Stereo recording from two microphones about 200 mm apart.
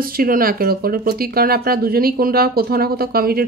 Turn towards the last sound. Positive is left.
turn(degrees=-50)  # may be behind; listen again after turning